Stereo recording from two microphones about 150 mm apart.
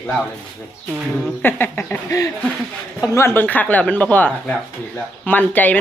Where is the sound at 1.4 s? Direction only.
15° left (ahead or behind).